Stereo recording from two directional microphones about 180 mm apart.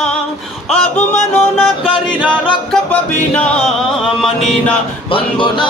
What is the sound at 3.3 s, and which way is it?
Speech, 5° left (ahead or behind).